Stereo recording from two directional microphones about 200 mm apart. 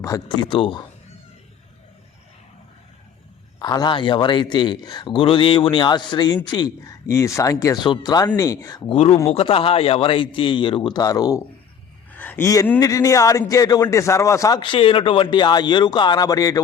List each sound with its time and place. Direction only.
0.0 s speech: 20° left (ahead or behind)
3.6 s a man's voice: 20° left (ahead or behind)
9.0 s a man's voice: 30° left (ahead or behind)